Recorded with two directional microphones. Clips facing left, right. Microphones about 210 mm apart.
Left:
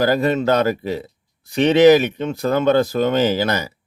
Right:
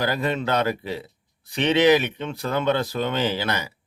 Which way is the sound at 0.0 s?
45° left (ahead or behind).